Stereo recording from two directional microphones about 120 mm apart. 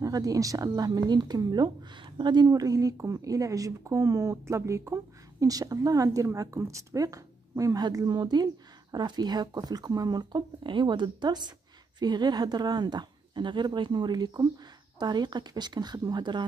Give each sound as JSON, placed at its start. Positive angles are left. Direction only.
{"t": 0.0, "sound": "speech", "side_deg": -30}